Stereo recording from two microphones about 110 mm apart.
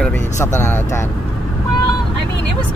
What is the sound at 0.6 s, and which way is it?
Speech, 20° left (ahead or behind).